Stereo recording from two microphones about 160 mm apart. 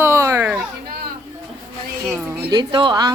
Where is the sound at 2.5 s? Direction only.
30° right (ahead or behind).